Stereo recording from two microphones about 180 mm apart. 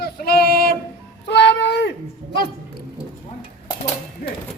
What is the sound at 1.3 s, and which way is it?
Speech, 75° left (ahead or behind).